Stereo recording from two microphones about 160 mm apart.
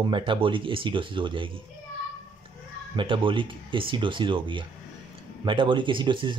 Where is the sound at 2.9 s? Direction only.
30° right (ahead or behind).